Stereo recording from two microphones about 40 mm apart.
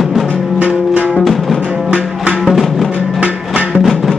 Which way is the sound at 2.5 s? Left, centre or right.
Centre.